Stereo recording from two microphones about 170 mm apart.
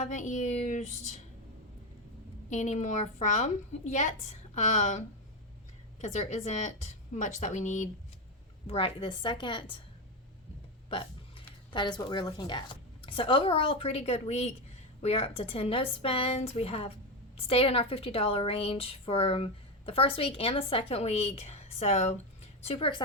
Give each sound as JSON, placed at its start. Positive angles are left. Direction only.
{"t": 0.0, "sound": "a woman's voice", "side_deg": 45}
{"t": 2.5, "sound": "a woman's voice", "side_deg": 45}
{"t": 8.6, "sound": "a woman's voice", "side_deg": 35}
{"t": 10.8, "sound": "a woman's voice", "side_deg": 35}